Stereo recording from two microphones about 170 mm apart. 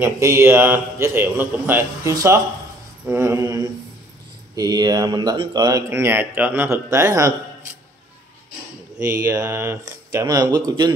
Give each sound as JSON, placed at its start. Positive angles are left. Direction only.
{"t": 0.0, "sound": "a man's voice", "side_deg": -15}
{"t": 9.2, "sound": "speech", "side_deg": -15}